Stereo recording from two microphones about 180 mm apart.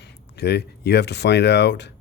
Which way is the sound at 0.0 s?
65° left (ahead or behind).